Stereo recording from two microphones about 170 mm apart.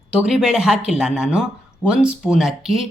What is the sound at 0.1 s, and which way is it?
Speech, 5° right (ahead or behind).